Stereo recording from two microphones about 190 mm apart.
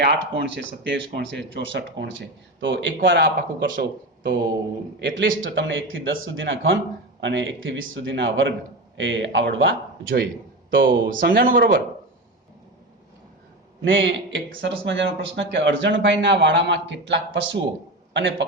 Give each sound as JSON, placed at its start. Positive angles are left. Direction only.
{"t": 0.0, "sound": "speech", "side_deg": -65}
{"t": 3.3, "sound": "speech", "side_deg": -60}
{"t": 10.8, "sound": "speech", "side_deg": -50}
{"t": 13.8, "sound": "a man's voice", "side_deg": -75}